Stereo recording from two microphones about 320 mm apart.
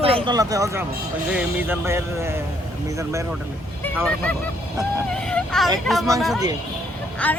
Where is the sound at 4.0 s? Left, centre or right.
Centre.